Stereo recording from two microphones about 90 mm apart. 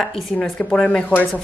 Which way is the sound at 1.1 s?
20° left (ahead or behind).